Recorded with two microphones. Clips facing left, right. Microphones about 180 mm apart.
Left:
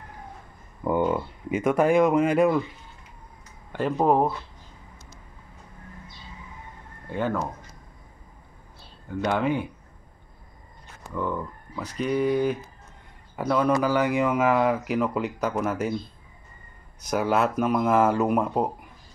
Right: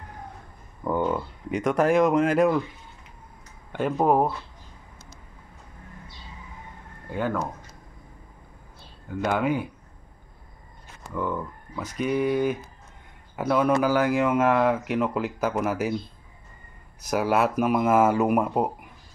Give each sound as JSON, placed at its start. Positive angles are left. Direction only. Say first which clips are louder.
{"t": 0.8, "sound": "speech", "louder": "left 2 dB", "side_deg": 10}
{"t": 3.7, "sound": "speech", "louder": "even", "side_deg": 0}
{"t": 7.1, "sound": "speech", "louder": "even", "side_deg": 0}
{"t": 9.2, "sound": "speech", "louder": "even", "side_deg": 0}
{"t": 11.1, "sound": "speech", "louder": "even", "side_deg": 0}
{"t": 17.0, "sound": "speech", "louder": "right 1 dB", "side_deg": -5}